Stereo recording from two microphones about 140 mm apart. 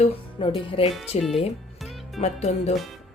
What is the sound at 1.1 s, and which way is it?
Speech, 50° left (ahead or behind).